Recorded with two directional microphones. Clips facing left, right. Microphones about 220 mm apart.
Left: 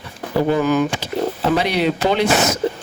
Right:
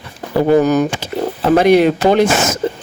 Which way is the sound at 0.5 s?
40° right (ahead or behind).